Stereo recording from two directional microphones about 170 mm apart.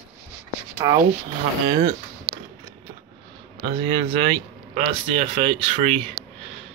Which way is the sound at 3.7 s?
30° right (ahead or behind).